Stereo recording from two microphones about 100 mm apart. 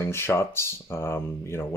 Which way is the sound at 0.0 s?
25° left (ahead or behind).